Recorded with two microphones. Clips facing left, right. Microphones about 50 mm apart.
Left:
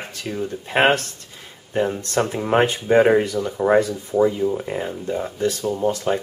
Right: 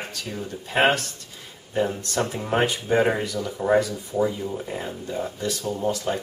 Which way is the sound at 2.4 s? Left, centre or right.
Left.